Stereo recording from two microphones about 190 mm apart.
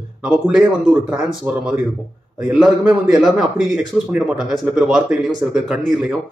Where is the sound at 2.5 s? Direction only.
Centre (ahead or behind).